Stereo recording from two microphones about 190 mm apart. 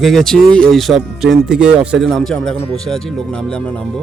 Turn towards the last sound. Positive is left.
turn(degrees=5)  # may be behind; listen again after turning